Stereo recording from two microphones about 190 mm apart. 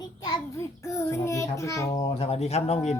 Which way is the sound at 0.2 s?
20° left (ahead or behind).